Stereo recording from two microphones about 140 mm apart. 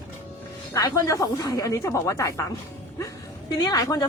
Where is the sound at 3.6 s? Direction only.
25° left (ahead or behind).